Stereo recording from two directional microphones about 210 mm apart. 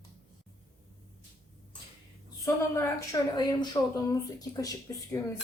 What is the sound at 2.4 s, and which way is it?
A woman's voice, 15° left (ahead or behind).